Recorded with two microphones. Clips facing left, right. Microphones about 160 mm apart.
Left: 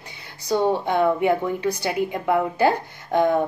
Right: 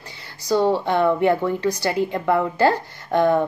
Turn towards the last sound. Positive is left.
turn(degrees=15)  # may be behind; listen again after turning